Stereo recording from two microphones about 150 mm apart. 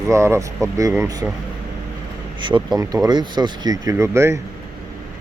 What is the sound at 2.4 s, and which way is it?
Speech, 30° right (ahead or behind).